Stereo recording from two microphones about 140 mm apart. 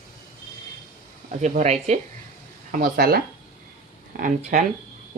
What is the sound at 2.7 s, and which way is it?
Speech, 90° right.